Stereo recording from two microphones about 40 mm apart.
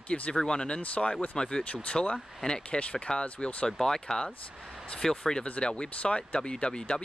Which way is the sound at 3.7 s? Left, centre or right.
Centre.